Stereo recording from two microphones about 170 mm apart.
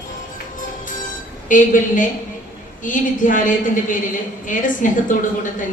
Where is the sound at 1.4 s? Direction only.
50° left (ahead or behind).